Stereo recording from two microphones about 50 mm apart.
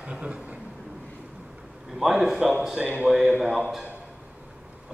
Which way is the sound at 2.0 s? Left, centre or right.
Centre.